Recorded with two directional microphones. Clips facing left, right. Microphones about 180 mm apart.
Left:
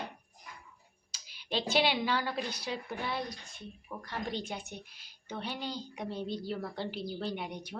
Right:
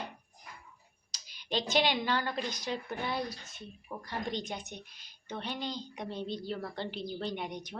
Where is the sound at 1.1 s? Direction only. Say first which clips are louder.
Right 1 dB; 5° left (ahead or behind).